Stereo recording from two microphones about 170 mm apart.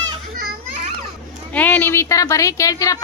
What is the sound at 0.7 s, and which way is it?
Children playing, 45° right (ahead or behind).